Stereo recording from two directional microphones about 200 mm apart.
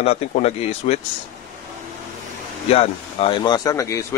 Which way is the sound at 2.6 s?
30° left (ahead or behind).